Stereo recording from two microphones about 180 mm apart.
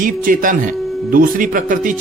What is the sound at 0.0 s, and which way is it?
Speech, 50° right (ahead or behind).